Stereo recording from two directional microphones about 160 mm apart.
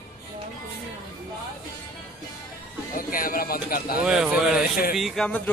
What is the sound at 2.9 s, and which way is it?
Speech, 60° left (ahead or behind).